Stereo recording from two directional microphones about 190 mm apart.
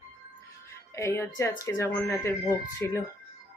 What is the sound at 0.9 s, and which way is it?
Speech, 15° left (ahead or behind).